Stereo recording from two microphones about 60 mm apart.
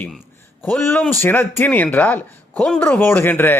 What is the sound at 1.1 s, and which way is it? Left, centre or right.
Speech, left.